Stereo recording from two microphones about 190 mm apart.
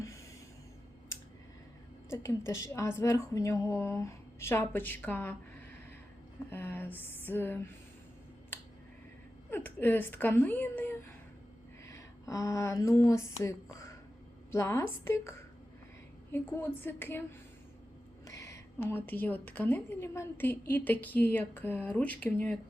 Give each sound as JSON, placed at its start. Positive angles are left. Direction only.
{"t": 2.0, "sound": "a woman's voice", "side_deg": 15}
{"t": 6.5, "sound": "a woman's voice", "side_deg": 10}
{"t": 9.5, "sound": "a woman's voice", "side_deg": 10}
{"t": 18.3, "sound": "a woman's voice", "side_deg": 15}